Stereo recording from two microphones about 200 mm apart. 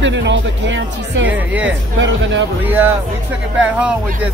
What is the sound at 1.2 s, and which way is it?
Speech, 10° right (ahead or behind).